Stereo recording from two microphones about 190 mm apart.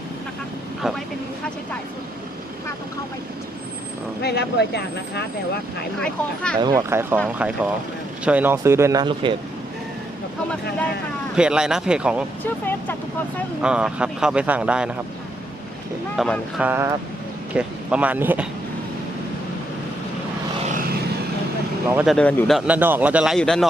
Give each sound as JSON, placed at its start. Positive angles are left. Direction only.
{"t": 0.8, "sound": "a man's voice", "side_deg": 0}
{"t": 4.2, "sound": "speech", "side_deg": 60}
{"t": 6.0, "sound": "a man's voice", "side_deg": 5}
{"t": 6.6, "sound": "speech", "side_deg": -20}
{"t": 11.3, "sound": "a man's voice", "side_deg": -5}
{"t": 13.6, "sound": "a man's voice", "side_deg": -5}
{"t": 16.1, "sound": "a man's voice", "side_deg": 0}
{"t": 16.6, "sound": "speech", "side_deg": -10}
{"t": 22.0, "sound": "a man's voice", "side_deg": 5}